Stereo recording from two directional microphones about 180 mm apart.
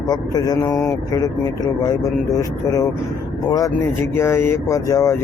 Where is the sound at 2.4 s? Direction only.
20° left (ahead or behind).